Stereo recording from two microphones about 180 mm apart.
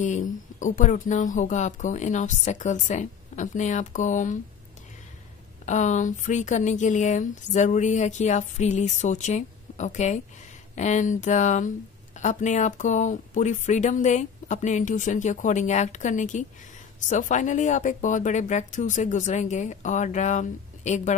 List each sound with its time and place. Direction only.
0.0 s speech: 45° left (ahead or behind)
5.7 s speech: 40° left (ahead or behind)